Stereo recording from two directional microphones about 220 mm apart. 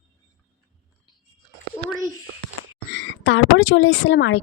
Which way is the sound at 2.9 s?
60° left (ahead or behind).